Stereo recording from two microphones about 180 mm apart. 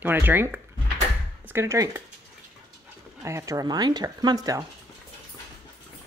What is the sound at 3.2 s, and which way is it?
Speech, 15° right (ahead or behind).